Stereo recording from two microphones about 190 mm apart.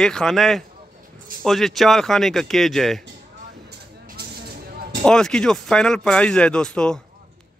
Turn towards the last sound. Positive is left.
turn(degrees=5)  # may be behind; listen again after turning